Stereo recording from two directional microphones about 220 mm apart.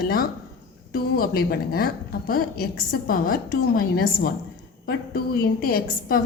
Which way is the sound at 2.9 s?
40° left (ahead or behind).